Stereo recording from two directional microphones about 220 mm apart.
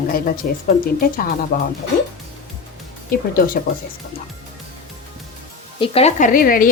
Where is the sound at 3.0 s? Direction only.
40° left (ahead or behind).